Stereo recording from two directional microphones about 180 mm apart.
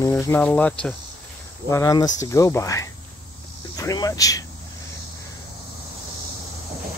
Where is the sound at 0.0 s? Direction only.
15° left (ahead or behind).